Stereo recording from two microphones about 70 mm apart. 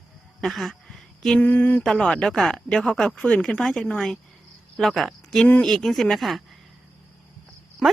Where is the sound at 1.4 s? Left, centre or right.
Left.